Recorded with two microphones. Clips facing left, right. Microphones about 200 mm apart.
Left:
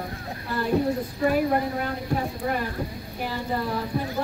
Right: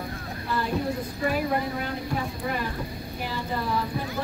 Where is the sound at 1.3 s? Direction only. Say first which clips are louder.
Left 3 dB; 45° left (ahead or behind).